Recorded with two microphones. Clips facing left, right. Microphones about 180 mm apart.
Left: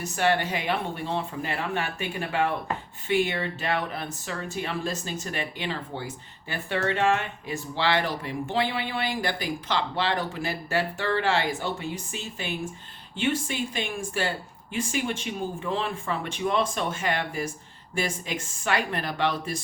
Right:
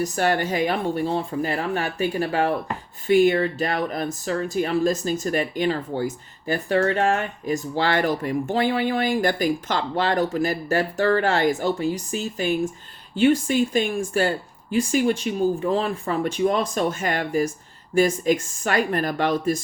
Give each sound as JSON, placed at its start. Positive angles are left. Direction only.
{"t": 0.0, "sound": "speech", "side_deg": -40}